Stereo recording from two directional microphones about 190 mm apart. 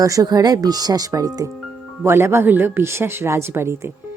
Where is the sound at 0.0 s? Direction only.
20° right (ahead or behind).